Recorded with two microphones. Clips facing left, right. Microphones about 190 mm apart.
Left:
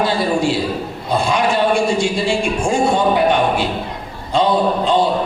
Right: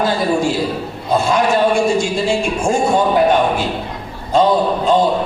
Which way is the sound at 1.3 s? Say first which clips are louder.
Right 1 dB; 45° right (ahead or behind).